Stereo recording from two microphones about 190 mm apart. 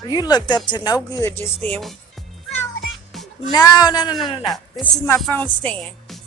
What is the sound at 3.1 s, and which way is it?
Music, centre (ahead or behind).